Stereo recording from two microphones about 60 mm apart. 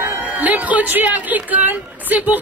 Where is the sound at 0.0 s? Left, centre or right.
Right.